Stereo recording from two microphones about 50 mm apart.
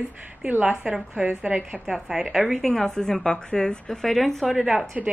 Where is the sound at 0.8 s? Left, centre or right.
Right.